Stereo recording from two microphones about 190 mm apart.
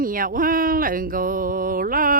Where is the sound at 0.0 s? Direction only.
45° right (ahead or behind).